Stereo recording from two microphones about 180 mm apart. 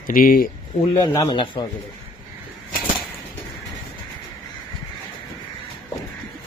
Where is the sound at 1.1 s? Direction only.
20° left (ahead or behind).